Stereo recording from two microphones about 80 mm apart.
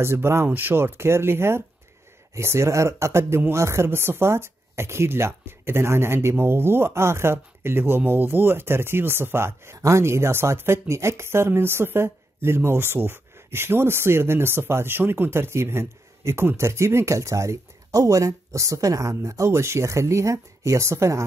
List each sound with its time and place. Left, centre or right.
0.0 s speech: right